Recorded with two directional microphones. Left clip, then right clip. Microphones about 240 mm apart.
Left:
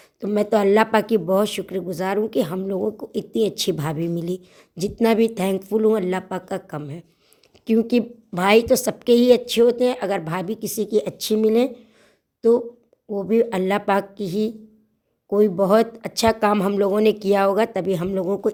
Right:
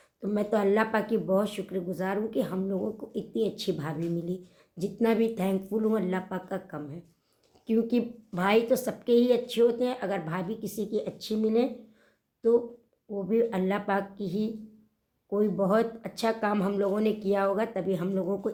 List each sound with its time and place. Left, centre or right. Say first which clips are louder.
0.2 s a woman's voice: left 8 dB; left